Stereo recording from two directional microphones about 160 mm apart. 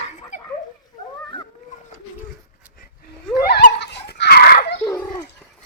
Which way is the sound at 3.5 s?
90° left.